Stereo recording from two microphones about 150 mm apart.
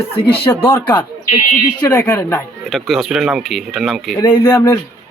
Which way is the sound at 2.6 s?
Centre (ahead or behind).